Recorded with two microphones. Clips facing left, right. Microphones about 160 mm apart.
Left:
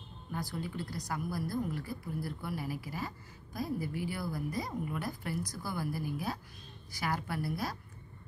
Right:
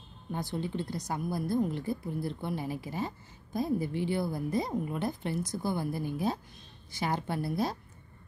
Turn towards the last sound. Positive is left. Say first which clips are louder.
# right 5 dB
turn(degrees=-25)  # may be behind; listen again after turning